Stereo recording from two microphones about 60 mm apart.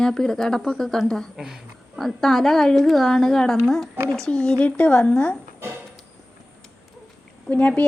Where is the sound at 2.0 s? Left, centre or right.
Centre; by 5.4 s left.